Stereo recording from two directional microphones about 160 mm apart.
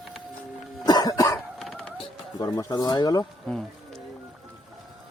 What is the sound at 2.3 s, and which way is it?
Speech, 20° left (ahead or behind).